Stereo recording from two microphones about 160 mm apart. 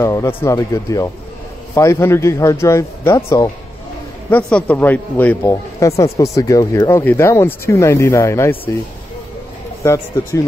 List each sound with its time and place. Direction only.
0.0 s speech: 20° left (ahead or behind)
9.8 s speech: 20° left (ahead or behind)